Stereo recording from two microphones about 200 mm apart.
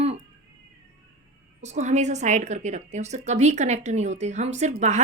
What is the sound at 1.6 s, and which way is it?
A woman's voice, 35° right (ahead or behind).